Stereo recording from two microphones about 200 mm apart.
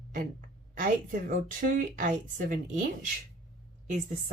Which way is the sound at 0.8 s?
45° right (ahead or behind).